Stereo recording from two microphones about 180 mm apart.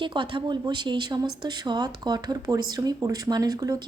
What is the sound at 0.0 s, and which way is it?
Speech, 25° right (ahead or behind).